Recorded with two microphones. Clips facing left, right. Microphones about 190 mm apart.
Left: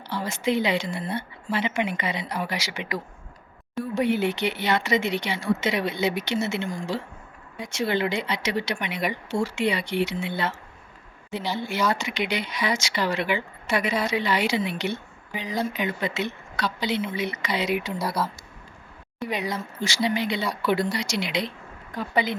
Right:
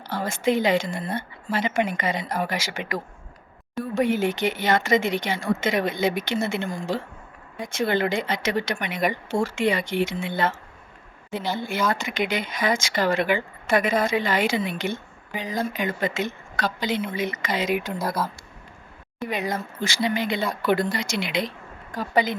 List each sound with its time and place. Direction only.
0.1 s speech: 50° right (ahead or behind)
19.3 s speech: 50° right (ahead or behind)